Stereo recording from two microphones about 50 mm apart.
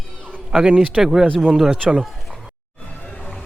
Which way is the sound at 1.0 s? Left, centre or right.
Centre.